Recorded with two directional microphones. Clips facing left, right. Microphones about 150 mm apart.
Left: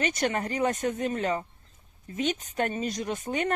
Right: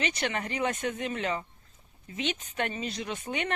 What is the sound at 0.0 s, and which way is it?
Speech, 40° left (ahead or behind).